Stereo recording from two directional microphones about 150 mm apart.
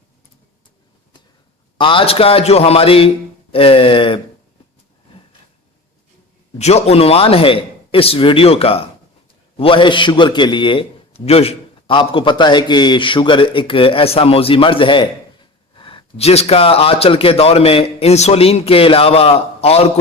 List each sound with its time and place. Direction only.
1.8 s a man's voice: 35° left (ahead or behind)
6.6 s a man's voice: 45° left (ahead or behind)